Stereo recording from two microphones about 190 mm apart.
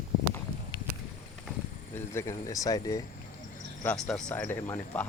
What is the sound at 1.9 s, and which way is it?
Speech, 15° left (ahead or behind).